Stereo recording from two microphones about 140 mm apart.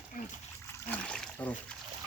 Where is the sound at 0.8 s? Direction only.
10° left (ahead or behind).